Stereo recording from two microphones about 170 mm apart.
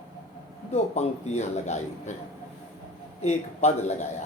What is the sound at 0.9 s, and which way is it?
A man's voice, 40° left (ahead or behind).